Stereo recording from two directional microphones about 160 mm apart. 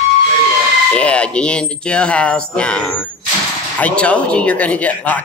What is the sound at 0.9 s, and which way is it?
Speech, 5° left (ahead or behind).